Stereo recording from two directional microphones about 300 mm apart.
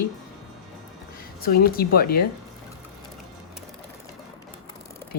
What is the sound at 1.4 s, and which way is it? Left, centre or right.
Speech, left.